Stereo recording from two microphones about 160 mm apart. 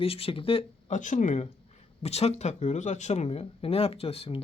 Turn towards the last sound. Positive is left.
turn(degrees=40)  # may be behind; listen again after turning